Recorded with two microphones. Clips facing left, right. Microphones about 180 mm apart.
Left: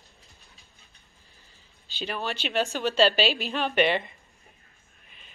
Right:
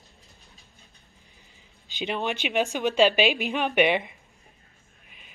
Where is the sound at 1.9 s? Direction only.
20° right (ahead or behind).